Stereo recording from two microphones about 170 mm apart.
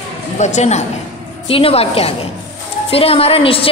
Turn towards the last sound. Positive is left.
turn(degrees=35)  # may be behind; listen again after turning